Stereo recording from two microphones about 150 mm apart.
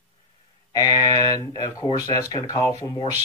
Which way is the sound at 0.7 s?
25° left (ahead or behind).